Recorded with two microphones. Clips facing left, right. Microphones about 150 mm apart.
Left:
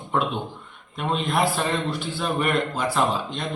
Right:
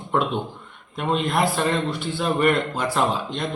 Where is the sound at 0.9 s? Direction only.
Centre (ahead or behind).